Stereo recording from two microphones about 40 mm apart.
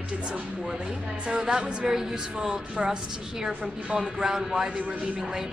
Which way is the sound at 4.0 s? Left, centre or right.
Centre.